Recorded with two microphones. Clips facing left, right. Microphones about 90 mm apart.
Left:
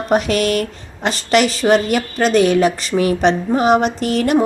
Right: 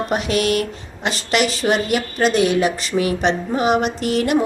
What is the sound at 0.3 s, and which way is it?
A woman's voice, 40° left (ahead or behind).